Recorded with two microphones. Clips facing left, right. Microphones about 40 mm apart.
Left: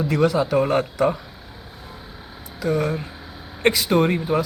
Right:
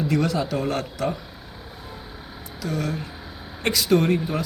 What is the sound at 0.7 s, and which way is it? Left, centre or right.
Speech, left.